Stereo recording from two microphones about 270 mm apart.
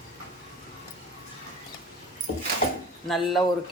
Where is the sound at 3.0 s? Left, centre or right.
Centre.